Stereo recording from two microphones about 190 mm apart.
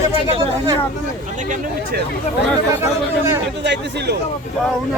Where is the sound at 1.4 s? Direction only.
40° right (ahead or behind).